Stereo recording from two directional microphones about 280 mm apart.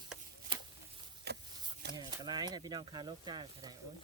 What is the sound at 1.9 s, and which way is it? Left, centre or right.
Speech, centre.